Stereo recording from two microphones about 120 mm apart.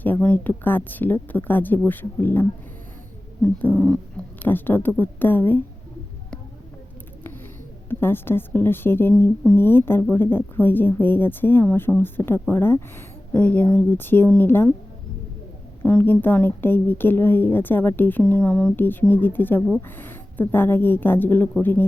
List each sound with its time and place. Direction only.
0.0 s speech: 15° left (ahead or behind)
3.8 s a sound: 5° left (ahead or behind)
4.4 s speech: 15° left (ahead or behind)
7.9 s speech: 20° left (ahead or behind)
15.8 s speech: 15° left (ahead or behind)